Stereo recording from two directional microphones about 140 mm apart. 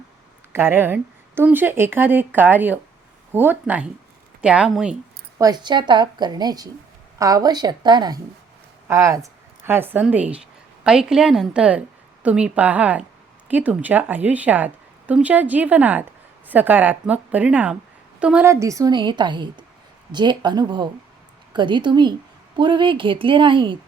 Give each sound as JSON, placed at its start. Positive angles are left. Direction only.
{"t": 0.5, "sound": "a woman's voice", "side_deg": -15}
{"t": 5.4, "sound": "a woman's voice", "side_deg": -30}
{"t": 8.9, "sound": "a woman's voice", "side_deg": -20}
{"t": 18.4, "sound": "a woman's voice", "side_deg": -20}
{"t": 18.9, "sound": "a woman's voice", "side_deg": -35}